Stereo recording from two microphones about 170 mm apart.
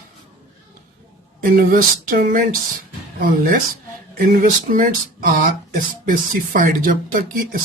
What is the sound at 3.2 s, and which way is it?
Speech, 50° right (ahead or behind).